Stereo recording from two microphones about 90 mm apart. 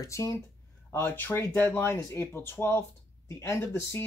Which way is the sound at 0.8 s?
20° left (ahead or behind).